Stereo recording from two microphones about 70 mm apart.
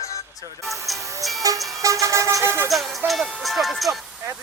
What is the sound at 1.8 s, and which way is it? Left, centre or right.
Speech, right.